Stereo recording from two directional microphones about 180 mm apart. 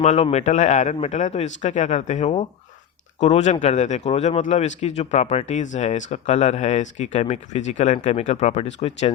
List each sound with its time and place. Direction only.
0.0 s speech: 40° left (ahead or behind)